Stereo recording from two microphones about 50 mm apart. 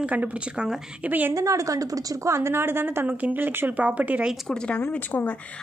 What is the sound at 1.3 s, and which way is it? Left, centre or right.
Speech, right.